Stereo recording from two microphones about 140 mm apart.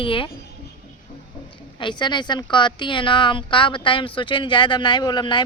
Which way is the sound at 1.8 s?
35° left (ahead or behind).